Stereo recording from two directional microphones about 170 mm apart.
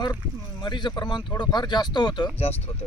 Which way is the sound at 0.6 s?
25° left (ahead or behind).